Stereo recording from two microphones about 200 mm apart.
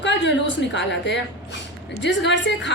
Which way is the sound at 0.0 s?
60° left (ahead or behind).